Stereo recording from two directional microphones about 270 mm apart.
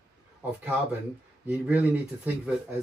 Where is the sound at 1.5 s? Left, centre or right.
Centre.